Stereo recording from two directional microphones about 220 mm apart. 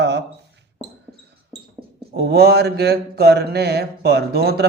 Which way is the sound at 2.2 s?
50° right (ahead or behind).